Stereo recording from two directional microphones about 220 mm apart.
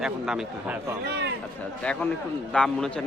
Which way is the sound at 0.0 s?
5° right (ahead or behind).